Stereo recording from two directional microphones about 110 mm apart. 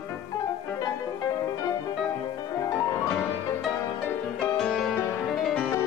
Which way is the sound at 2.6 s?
25° left (ahead or behind).